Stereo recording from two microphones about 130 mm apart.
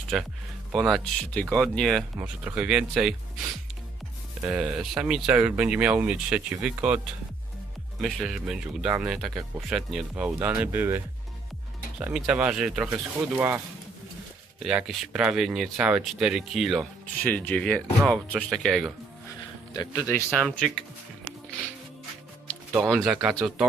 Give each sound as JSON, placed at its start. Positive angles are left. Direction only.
{"t": 0.1, "sound": "speech", "side_deg": 0}
{"t": 2.1, "sound": "speech", "side_deg": -10}
{"t": 4.4, "sound": "speech", "side_deg": -10}
{"t": 8.0, "sound": "speech", "side_deg": 0}
{"t": 10.4, "sound": "speech", "side_deg": -15}
{"t": 14.6, "sound": "speech", "side_deg": -5}
{"t": 17.2, "sound": "speech", "side_deg": 10}
{"t": 19.7, "sound": "speech", "side_deg": 30}
{"t": 20.0, "sound": "speech", "side_deg": 20}
{"t": 20.3, "sound": "speech", "side_deg": 0}
{"t": 22.9, "sound": "speech", "side_deg": 0}